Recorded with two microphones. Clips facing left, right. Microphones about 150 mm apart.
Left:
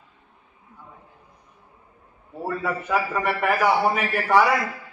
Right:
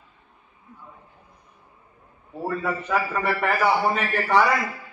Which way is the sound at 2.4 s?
5° left (ahead or behind).